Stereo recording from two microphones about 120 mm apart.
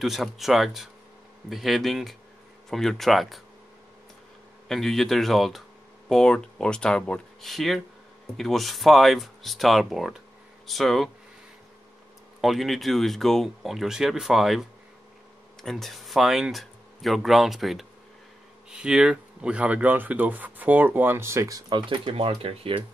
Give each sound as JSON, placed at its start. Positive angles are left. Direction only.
{"t": 0.0, "sound": "speech", "side_deg": 0}
{"t": 4.6, "sound": "speech", "side_deg": 0}
{"t": 12.4, "sound": "speech", "side_deg": 0}